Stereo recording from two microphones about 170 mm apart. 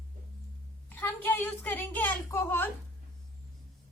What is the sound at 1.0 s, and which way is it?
A child's voice, 10° left (ahead or behind).